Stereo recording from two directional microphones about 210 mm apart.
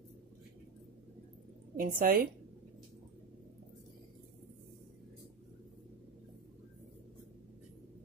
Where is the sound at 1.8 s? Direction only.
40° right (ahead or behind).